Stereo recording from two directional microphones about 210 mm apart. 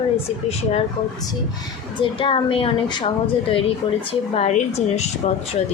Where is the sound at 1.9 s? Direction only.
25° left (ahead or behind).